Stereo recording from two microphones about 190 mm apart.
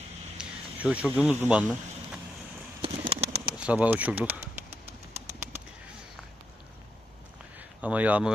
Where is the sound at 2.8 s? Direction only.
30° right (ahead or behind).